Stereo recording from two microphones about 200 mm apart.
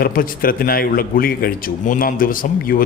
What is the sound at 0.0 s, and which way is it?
Speech, 45° left (ahead or behind).